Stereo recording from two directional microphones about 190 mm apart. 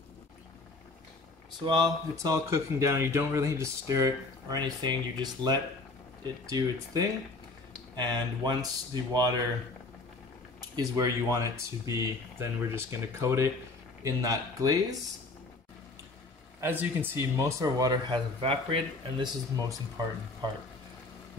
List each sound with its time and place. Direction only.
1.6 s speech: 25° right (ahead or behind)
10.8 s speech: 20° right (ahead or behind)
16.6 s speech: 10° right (ahead or behind); by 19.2 s 30° right (ahead or behind)